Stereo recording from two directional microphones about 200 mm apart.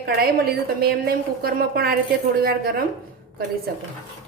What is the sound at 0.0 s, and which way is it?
A woman's voice, 50° right (ahead or behind).